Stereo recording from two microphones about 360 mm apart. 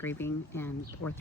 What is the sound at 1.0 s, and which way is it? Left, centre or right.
Speech, left.